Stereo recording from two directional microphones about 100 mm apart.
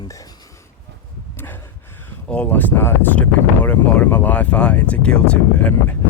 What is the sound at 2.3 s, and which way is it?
Speech, 15° left (ahead or behind).